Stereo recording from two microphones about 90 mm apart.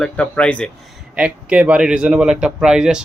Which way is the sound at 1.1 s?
10° right (ahead or behind).